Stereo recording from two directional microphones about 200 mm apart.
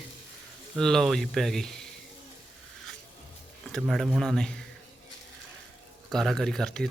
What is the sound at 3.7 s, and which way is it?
Speech, centre (ahead or behind).